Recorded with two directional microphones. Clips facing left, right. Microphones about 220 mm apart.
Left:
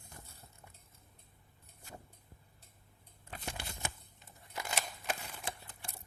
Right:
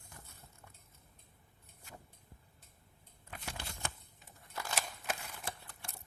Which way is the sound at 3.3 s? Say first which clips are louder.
Left 3 dB; 30° left (ahead or behind).